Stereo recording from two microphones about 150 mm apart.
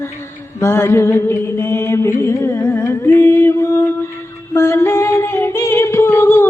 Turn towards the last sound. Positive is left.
turn(degrees=15)  # may be behind; listen again after turning